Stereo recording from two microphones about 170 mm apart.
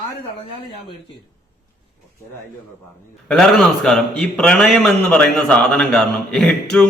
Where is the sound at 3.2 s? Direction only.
5° left (ahead or behind).